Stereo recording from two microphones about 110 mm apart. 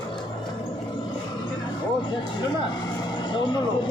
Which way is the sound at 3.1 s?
45° left (ahead or behind).